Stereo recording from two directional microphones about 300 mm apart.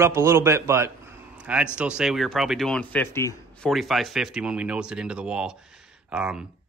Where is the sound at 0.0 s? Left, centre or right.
Centre.